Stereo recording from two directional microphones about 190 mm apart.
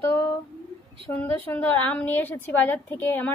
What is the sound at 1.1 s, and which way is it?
A woman's voice, 10° left (ahead or behind).